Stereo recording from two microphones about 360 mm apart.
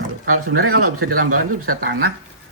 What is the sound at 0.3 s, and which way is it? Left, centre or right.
Speech, right.